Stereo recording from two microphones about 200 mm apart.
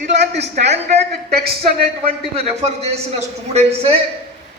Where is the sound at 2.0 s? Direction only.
30° right (ahead or behind).